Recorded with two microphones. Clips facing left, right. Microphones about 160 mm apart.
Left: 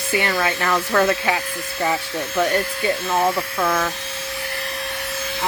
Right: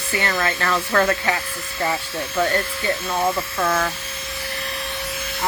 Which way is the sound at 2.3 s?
20° left (ahead or behind).